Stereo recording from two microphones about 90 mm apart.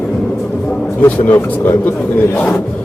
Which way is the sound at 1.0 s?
25° left (ahead or behind).